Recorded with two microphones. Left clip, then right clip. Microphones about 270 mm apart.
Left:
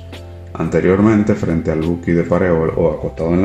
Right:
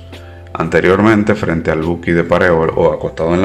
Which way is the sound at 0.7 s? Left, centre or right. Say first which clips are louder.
Right 3 dB; right.